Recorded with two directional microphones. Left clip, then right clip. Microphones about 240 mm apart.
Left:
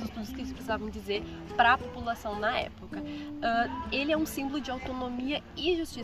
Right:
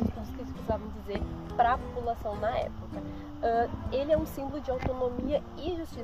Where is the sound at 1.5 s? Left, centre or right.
Centre.